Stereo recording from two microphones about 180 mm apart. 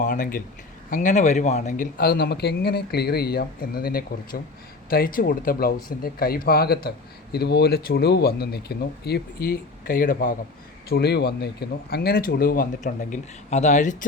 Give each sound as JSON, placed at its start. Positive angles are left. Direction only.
{"t": 0.0, "sound": "a man's voice", "side_deg": 45}